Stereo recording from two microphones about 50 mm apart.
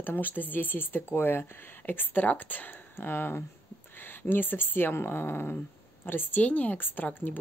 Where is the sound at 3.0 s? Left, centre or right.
Left.